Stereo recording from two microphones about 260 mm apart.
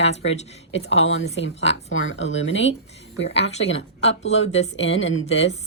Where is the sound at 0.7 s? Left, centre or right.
Left.